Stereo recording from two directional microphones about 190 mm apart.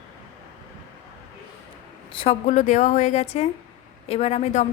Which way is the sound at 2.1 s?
30° left (ahead or behind).